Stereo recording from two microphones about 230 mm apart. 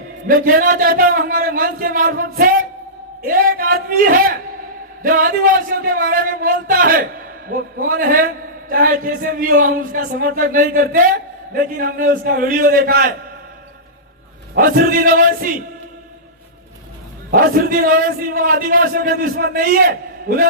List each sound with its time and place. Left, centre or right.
0.3 s a man's voice: right
14.5 s a man's voice: right
17.3 s a man's voice: right